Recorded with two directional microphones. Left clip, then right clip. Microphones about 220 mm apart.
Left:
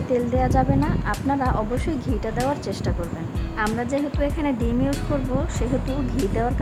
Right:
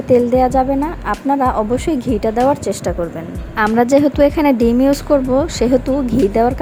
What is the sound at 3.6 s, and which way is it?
A woman's voice, 30° right (ahead or behind).